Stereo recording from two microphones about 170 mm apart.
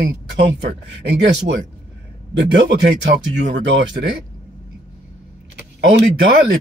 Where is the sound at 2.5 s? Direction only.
90° right.